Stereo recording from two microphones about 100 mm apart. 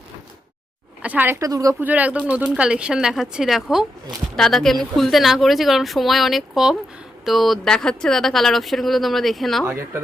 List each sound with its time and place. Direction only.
1.0 s speech: 15° right (ahead or behind)
1.4 s speech: 35° right (ahead or behind)
1.8 s speech: 15° right (ahead or behind); by 9.6 s centre (ahead or behind)
9.6 s speech: 25° right (ahead or behind)